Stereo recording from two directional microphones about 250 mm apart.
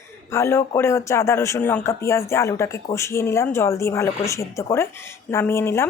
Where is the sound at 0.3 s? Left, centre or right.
Centre.